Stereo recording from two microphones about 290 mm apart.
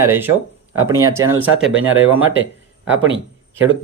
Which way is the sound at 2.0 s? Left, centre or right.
Right.